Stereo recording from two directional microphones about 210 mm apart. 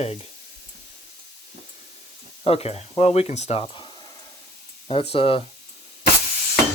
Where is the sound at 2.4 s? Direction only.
30° left (ahead or behind).